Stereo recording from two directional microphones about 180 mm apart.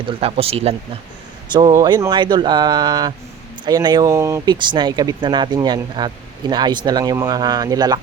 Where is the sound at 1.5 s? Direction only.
20° right (ahead or behind).